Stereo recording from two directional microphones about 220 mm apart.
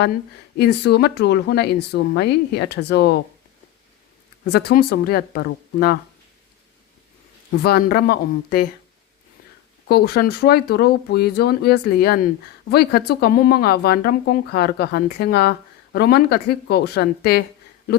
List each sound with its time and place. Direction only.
0.5 s speech: 45° left (ahead or behind)
4.5 s speech: 45° left (ahead or behind)
7.6 s speech: 45° left (ahead or behind)
9.9 s speech: 45° left (ahead or behind)